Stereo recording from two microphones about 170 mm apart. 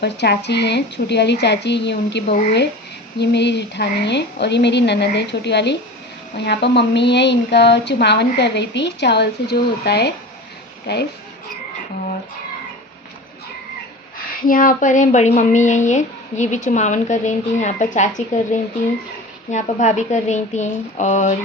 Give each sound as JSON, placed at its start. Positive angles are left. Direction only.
{"t": 0.0, "sound": "a woman's voice", "side_deg": 80}
{"t": 14.4, "sound": "speech", "side_deg": 55}